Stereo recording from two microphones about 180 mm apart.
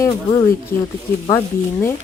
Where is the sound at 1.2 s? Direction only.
15° left (ahead or behind).